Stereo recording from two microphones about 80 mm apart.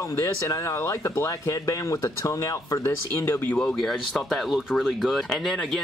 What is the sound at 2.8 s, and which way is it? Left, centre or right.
Speech, left.